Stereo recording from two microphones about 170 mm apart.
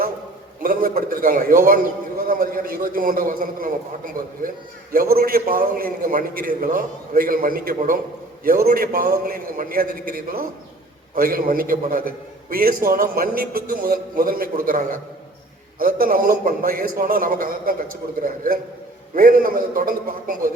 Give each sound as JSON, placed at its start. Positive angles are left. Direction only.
{"t": 0.6, "sound": "a man's voice", "side_deg": -55}